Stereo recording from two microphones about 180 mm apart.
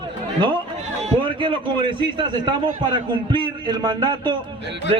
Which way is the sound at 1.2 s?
30° right (ahead or behind).